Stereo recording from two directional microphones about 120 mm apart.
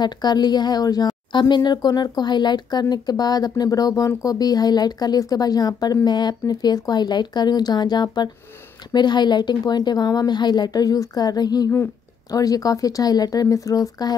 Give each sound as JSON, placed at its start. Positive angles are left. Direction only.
{"t": 0.0, "sound": "a woman's voice", "side_deg": 35}